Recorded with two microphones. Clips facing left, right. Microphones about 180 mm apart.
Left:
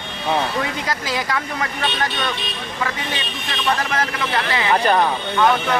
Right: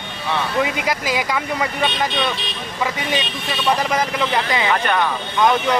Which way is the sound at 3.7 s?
15° right (ahead or behind).